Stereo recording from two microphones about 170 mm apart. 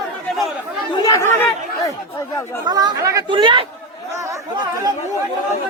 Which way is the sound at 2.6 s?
25° right (ahead or behind).